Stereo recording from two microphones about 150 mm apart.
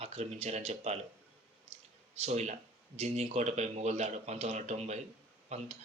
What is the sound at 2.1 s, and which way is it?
Speech, 50° right (ahead or behind).